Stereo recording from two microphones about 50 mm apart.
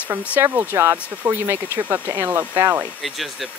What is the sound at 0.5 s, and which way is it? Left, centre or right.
Speech, right.